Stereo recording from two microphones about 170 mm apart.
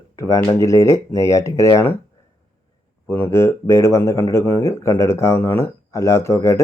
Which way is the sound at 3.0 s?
15° left (ahead or behind).